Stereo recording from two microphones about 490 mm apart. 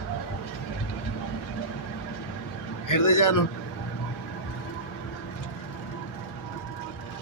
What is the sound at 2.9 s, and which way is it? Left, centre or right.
Speech, left.